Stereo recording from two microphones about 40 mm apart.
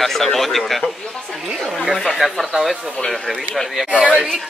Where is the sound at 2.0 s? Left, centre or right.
Centre.